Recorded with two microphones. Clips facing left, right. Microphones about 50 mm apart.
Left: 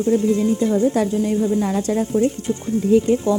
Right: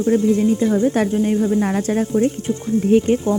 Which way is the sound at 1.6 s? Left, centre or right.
Right.